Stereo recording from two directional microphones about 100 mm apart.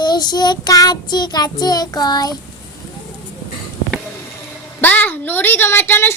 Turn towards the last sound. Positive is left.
turn(degrees=20)  # may be behind; listen again after turning